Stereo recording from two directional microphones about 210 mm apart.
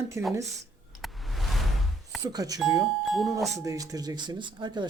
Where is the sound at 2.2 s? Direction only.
15° right (ahead or behind).